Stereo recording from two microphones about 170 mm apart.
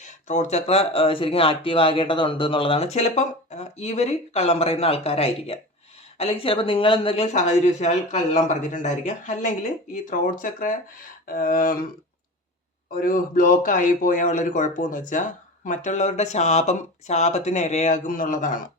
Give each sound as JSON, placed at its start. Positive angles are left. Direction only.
{"t": 0.0, "sound": "speech", "side_deg": 45}
{"t": 7.3, "sound": "a man's voice", "side_deg": 45}
{"t": 11.3, "sound": "a sound", "side_deg": 55}
{"t": 12.9, "sound": "a man's voice", "side_deg": 55}